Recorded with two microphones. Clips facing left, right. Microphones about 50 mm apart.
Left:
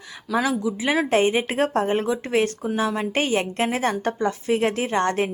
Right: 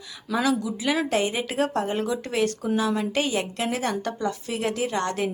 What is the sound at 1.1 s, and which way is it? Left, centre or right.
A woman's voice, left.